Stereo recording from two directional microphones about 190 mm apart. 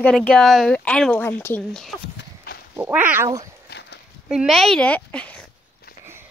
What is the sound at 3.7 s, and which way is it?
Horse, 60° left (ahead or behind).